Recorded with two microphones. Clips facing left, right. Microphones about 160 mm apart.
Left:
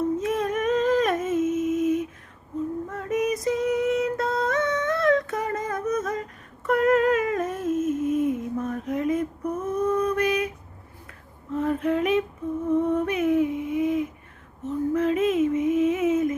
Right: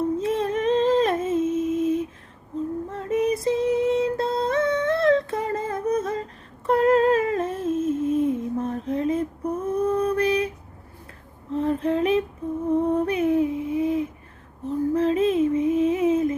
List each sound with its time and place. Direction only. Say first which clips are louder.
0.2 s humming: right 1 dB; 30° right (ahead or behind)
2.9 s music: right 3 dB; 30° right (ahead or behind)
6.7 s humming: right 2 dB; 30° right (ahead or behind)
11.5 s female singing: right 1 dB; 30° right (ahead or behind)
12.7 s a sound: right 1 dB; 30° right (ahead or behind)
14.6 s child singing: right 2 dB; 30° right (ahead or behind)